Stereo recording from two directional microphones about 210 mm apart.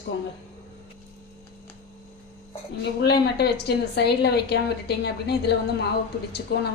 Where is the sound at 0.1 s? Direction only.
55° left (ahead or behind).